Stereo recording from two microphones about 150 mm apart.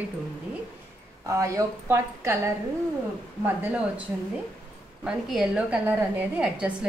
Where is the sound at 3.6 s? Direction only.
10° right (ahead or behind).